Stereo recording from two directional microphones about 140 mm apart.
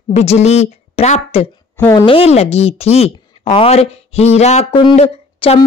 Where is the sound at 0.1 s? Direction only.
50° left (ahead or behind).